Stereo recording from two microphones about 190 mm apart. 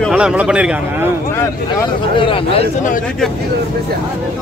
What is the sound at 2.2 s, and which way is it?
Speech, 25° left (ahead or behind).